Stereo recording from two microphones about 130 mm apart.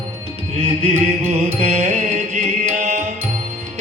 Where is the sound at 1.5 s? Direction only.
60° right (ahead or behind).